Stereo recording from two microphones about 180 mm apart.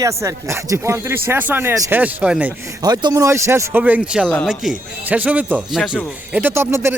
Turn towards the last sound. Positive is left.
turn(degrees=-15)  # may be behind; listen again after turning